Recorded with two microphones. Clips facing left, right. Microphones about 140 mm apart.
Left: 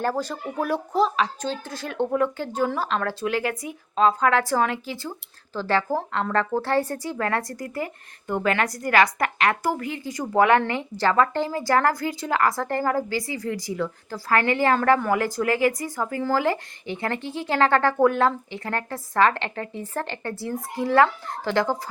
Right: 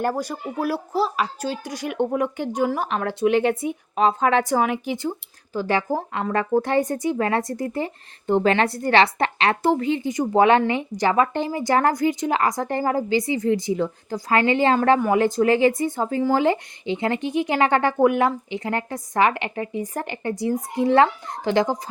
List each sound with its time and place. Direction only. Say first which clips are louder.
0.0 s a woman's voice: right 1 dB; 10° right (ahead or behind)